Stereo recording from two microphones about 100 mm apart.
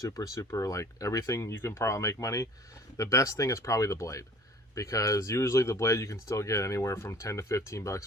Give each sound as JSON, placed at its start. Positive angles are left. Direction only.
{"t": 0.0, "sound": "speech", "side_deg": 35}